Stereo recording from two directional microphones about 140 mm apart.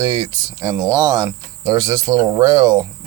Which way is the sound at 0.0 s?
25° right (ahead or behind).